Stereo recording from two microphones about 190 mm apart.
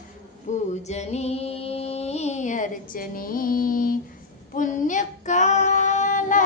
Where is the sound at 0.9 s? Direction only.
35° left (ahead or behind).